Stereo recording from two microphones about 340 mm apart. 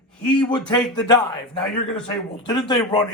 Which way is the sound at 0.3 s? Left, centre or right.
Centre.